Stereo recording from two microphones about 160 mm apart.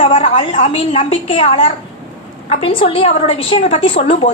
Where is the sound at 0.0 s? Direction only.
35° left (ahead or behind).